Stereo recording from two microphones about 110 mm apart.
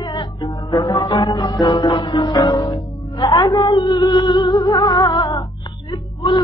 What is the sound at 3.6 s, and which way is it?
Music, 45° left (ahead or behind).